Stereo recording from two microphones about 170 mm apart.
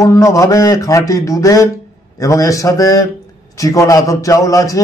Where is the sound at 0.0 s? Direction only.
20° left (ahead or behind).